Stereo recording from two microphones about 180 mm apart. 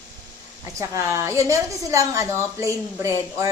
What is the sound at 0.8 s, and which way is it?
A woman's voice, 15° right (ahead or behind).